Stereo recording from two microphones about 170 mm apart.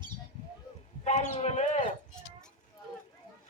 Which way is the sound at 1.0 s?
40° left (ahead or behind).